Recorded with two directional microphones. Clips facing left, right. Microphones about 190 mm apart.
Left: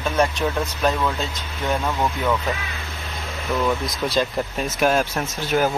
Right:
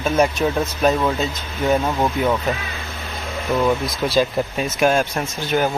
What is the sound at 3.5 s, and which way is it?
Speech, 20° right (ahead or behind).